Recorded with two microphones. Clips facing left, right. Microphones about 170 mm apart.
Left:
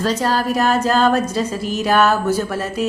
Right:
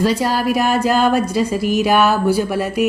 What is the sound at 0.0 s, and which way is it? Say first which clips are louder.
A woman's voice: right 2 dB; 10° right (ahead or behind).